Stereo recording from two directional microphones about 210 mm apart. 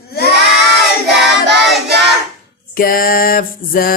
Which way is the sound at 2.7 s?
45° left (ahead or behind).